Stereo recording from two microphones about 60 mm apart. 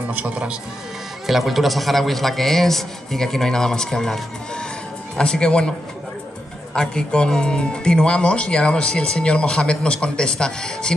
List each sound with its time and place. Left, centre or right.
0.1 s speech: right
1.2 s a man's voice: centre
6.7 s speech: centre